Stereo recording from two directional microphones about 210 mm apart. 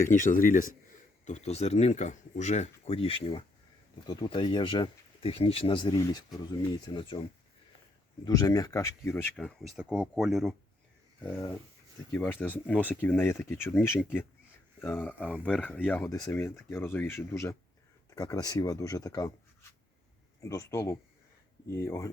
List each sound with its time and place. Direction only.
0.0 s speech: 40° left (ahead or behind); by 7.2 s 20° left (ahead or behind)
8.2 s speech: 15° left (ahead or behind)
20.4 s speech: 15° left (ahead or behind)